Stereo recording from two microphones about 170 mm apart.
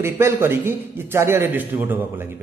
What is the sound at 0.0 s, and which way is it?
A man's voice, 15° right (ahead or behind).